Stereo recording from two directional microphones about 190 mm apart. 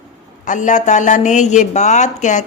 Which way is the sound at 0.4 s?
40° left (ahead or behind).